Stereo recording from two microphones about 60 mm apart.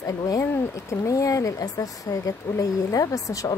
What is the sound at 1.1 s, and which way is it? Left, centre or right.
Speech, left.